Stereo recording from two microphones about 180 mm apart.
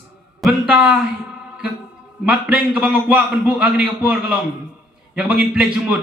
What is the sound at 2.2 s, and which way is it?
A man's voice, 5° right (ahead or behind).